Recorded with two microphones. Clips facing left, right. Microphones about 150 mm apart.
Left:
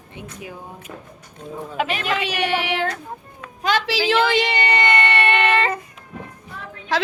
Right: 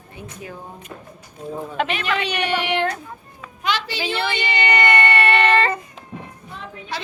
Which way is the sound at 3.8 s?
90° left.